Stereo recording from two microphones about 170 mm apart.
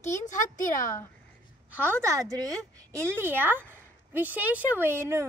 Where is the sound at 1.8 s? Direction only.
15° right (ahead or behind).